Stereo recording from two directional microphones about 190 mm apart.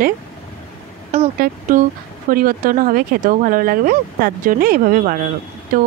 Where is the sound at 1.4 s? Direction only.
45° right (ahead or behind).